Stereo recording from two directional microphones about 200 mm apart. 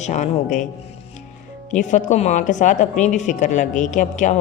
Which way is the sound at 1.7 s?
40° left (ahead or behind).